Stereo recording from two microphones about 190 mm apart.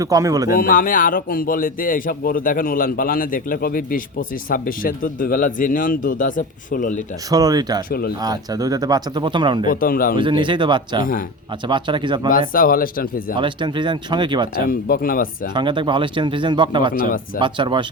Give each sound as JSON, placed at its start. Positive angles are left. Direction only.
{"t": 0.0, "sound": "speech", "side_deg": -15}
{"t": 0.5, "sound": "speech", "side_deg": 50}
{"t": 7.3, "sound": "speech", "side_deg": -20}
{"t": 7.9, "sound": "speech", "side_deg": 55}
{"t": 8.2, "sound": "speech", "side_deg": -20}
{"t": 9.6, "sound": "speech", "side_deg": 50}
{"t": 10.2, "sound": "speech", "side_deg": -25}
{"t": 12.3, "sound": "speech", "side_deg": 45}
{"t": 13.4, "sound": "speech", "side_deg": -25}
{"t": 14.7, "sound": "speech", "side_deg": 50}
{"t": 15.5, "sound": "speech", "side_deg": -25}